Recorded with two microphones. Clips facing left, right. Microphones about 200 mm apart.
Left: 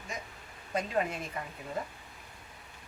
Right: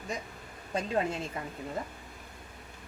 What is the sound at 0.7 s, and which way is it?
Speech, 30° right (ahead or behind).